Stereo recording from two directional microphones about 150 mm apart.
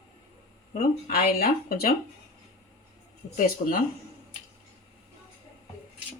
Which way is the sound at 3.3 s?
75° left (ahead or behind).